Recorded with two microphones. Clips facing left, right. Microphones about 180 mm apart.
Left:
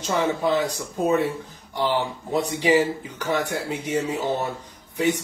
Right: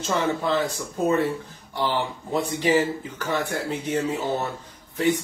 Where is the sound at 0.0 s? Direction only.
15° left (ahead or behind).